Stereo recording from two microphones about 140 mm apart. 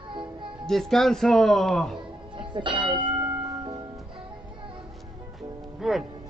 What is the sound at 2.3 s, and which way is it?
Speech, 35° right (ahead or behind).